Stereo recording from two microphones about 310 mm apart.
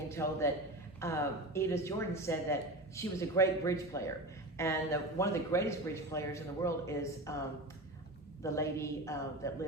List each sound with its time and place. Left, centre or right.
0.1 s a man's voice: centre
8.4 s speech: centre